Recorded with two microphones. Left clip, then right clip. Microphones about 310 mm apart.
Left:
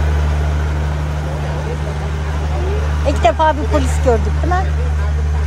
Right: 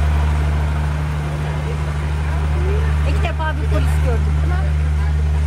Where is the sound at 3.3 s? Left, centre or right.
Left.